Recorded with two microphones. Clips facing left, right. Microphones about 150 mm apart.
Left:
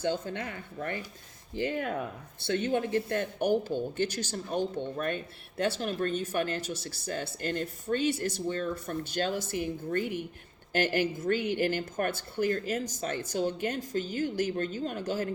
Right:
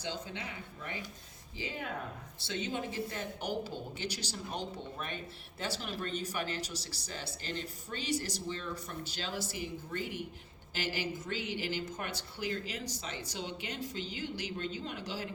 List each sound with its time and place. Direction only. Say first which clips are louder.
0.0 s speech: left 9 dB; 50° left (ahead or behind)